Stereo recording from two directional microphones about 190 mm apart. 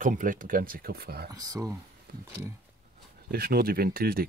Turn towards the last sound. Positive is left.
turn(degrees=-50)  # may be behind; listen again after turning